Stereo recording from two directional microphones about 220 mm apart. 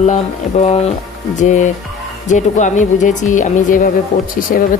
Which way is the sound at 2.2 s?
35° left (ahead or behind).